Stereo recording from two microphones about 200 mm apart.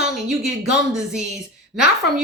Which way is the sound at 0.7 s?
5° right (ahead or behind).